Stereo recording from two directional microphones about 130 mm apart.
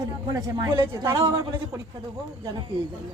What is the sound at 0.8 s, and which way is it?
Speech, 25° right (ahead or behind).